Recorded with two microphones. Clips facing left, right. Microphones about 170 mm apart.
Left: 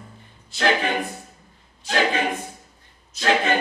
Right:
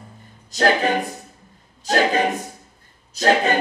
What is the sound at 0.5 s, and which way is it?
A capella, 40° right (ahead or behind).